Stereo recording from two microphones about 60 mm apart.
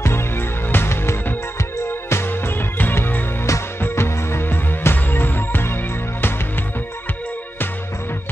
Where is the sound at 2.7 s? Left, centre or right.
Left.